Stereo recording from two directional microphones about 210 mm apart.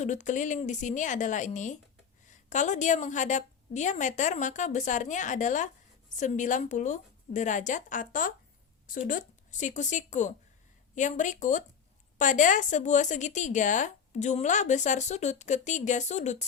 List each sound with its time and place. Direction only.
0.0 s a woman's voice: 35° left (ahead or behind)